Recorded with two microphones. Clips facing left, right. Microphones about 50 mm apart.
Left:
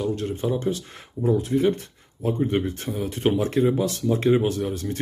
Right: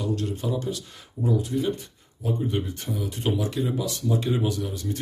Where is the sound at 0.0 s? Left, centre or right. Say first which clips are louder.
Left 3 dB; left.